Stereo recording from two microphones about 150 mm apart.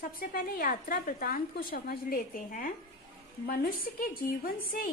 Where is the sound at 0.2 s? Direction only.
80° left.